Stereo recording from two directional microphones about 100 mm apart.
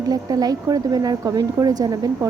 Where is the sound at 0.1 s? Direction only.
40° right (ahead or behind).